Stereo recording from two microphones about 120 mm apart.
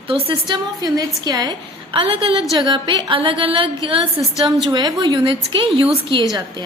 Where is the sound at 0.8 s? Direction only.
30° right (ahead or behind).